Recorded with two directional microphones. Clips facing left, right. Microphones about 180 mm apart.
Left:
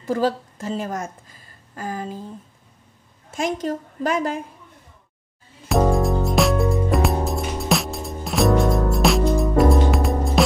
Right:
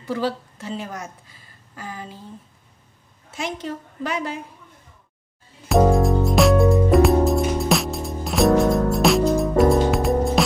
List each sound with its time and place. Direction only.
0.0 s a woman's voice: 45° left (ahead or behind)
3.3 s a woman's voice: 45° left (ahead or behind)
5.7 s music: centre (ahead or behind)